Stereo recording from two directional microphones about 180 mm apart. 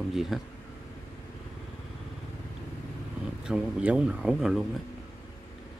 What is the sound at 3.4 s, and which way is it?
Speech, 5° right (ahead or behind).